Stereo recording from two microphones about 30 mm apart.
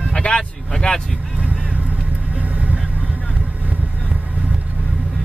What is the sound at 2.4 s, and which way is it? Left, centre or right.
Vehicle, right.